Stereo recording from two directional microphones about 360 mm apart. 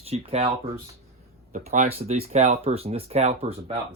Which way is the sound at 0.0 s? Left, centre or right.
Centre.